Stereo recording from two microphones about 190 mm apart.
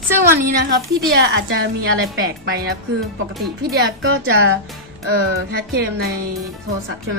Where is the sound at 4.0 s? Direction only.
90° right.